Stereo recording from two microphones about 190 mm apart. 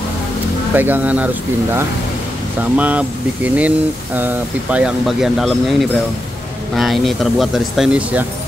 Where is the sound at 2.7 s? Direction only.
10° right (ahead or behind).